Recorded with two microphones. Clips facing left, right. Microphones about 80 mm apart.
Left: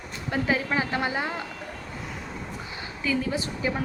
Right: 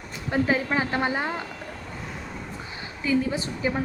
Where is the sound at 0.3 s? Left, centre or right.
Right.